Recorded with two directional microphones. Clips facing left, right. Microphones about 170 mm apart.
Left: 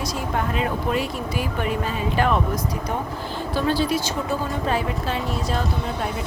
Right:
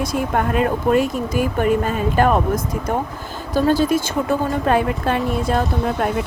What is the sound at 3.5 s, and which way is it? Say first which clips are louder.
Speech: right 6 dB; 45° right (ahead or behind).